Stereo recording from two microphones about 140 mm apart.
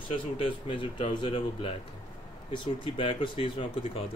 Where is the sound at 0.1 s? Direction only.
40° left (ahead or behind).